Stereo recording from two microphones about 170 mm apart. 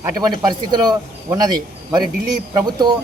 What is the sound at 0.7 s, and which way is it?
Speech, 25° right (ahead or behind).